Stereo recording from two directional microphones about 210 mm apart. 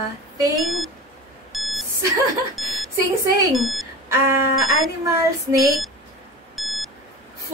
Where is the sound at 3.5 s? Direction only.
Centre (ahead or behind).